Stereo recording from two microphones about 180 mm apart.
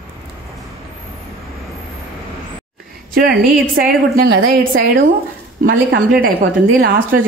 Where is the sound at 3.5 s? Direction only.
55° right (ahead or behind).